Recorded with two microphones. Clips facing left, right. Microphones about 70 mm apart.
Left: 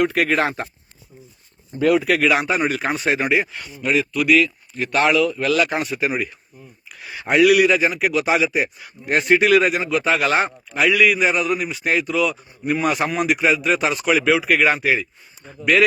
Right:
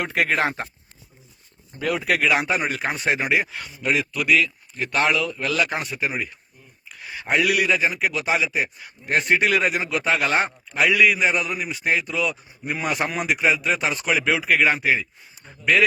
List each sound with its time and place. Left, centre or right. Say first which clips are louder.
0.0 s speech: left 4 dB; right
2.0 s a man's voice: left 3 dB; centre